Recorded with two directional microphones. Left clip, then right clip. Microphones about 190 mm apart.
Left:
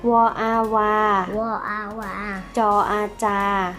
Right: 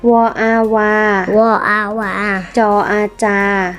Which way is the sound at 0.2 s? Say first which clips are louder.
Right 6 dB; 35° right (ahead or behind).